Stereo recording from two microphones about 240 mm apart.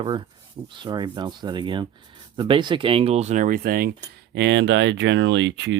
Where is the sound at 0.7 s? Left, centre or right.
Centre.